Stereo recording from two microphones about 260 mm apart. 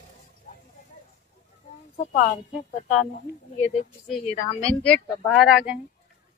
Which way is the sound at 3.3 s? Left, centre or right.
Right.